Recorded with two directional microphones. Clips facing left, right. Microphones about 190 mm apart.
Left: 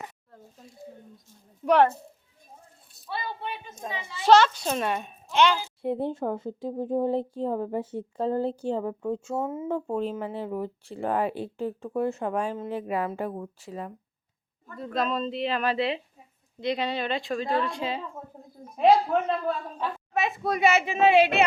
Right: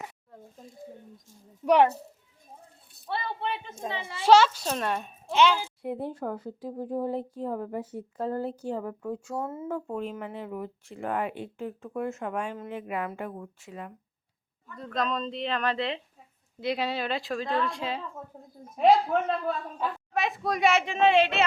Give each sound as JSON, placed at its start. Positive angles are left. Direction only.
{"t": 1.6, "sound": "a woman's voice", "side_deg": -15}
{"t": 3.1, "sound": "a sound", "side_deg": -65}
{"t": 3.8, "sound": "a child's voice", "side_deg": -30}
{"t": 4.2, "sound": "a woman's voice", "side_deg": -10}
{"t": 5.8, "sound": "speech", "side_deg": 30}
{"t": 14.8, "sound": "a woman's voice", "side_deg": 5}
{"t": 16.6, "sound": "a woman's voice", "side_deg": -5}
{"t": 19.5, "sound": "a woman's voice", "side_deg": 0}